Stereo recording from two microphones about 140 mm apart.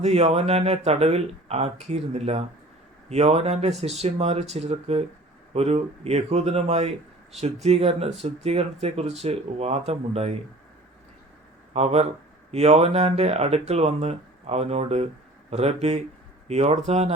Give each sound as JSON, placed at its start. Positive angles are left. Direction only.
{"t": 0.0, "sound": "speech", "side_deg": -50}
{"t": 11.7, "sound": "speech", "side_deg": -50}